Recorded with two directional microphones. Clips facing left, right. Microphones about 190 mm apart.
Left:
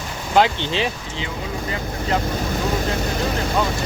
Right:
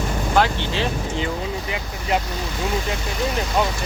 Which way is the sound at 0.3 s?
15° left (ahead or behind).